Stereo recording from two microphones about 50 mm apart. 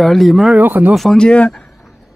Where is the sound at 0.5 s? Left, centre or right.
Right.